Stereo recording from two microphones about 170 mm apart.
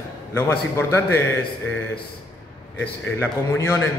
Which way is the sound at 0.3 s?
15° left (ahead or behind).